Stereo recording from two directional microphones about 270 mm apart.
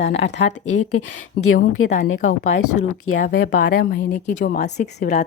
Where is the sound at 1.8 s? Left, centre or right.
Left.